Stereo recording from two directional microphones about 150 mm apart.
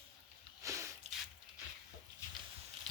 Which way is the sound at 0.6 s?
20° right (ahead or behind).